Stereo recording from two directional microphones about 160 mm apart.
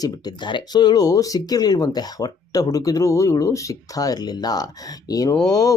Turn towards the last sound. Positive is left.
turn(degrees=20)  # may be behind; listen again after turning